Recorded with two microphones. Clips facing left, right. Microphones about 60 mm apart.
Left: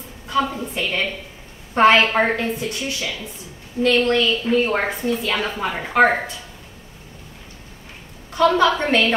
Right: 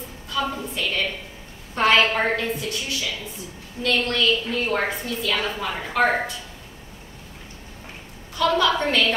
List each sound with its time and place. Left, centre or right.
0.3 s a woman's voice: left
8.4 s a woman's voice: left